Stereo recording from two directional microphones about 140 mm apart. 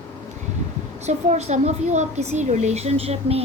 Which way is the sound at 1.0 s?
55° right (ahead or behind).